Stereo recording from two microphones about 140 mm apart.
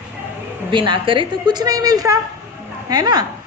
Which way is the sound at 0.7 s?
35° right (ahead or behind).